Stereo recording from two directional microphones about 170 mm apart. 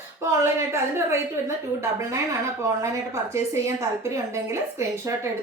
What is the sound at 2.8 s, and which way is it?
A woman's voice, 15° right (ahead or behind).